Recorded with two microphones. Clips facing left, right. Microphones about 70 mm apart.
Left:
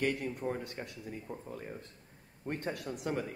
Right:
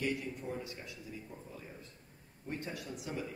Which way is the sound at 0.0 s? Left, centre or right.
Left.